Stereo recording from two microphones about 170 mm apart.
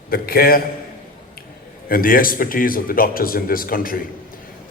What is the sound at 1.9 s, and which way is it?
Speech, 55° left (ahead or behind).